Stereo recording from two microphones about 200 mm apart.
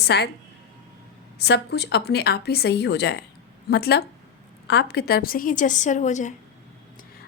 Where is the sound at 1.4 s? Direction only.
55° left (ahead or behind); by 6.4 s 40° left (ahead or behind).